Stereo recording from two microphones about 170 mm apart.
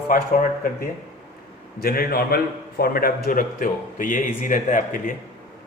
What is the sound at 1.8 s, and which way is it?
A man's voice, 60° left (ahead or behind).